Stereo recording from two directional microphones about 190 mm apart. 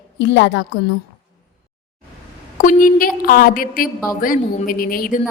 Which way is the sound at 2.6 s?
45° left (ahead or behind).